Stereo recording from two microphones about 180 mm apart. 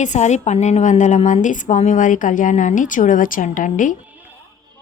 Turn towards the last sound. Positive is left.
turn(degrees=45)  # may be behind; listen again after turning